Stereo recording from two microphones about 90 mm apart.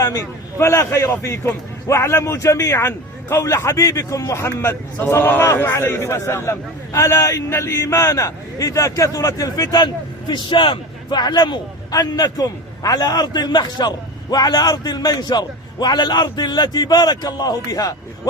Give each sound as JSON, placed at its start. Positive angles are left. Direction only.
{"t": 0.0, "sound": "a man's voice", "side_deg": 35}